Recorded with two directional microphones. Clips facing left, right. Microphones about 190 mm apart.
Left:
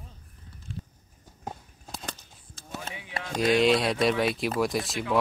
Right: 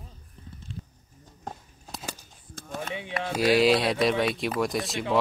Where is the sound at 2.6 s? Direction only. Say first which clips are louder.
Right 4 dB; 50° right (ahead or behind).